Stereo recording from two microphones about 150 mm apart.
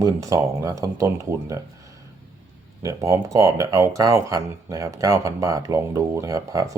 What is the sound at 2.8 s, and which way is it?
Speech, 20° right (ahead or behind).